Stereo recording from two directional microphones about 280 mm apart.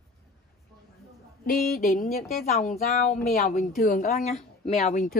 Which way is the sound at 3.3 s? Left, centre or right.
Left.